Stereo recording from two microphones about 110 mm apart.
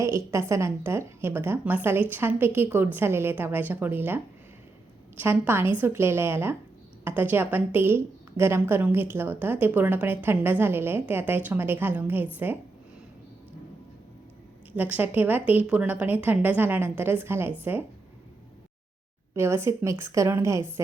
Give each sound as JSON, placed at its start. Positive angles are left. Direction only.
{"t": 0.0, "sound": "a woman's voice", "side_deg": -25}
{"t": 5.2, "sound": "a woman's voice", "side_deg": -20}
{"t": 14.8, "sound": "a woman's voice", "side_deg": -15}
{"t": 19.3, "sound": "a woman's voice", "side_deg": -25}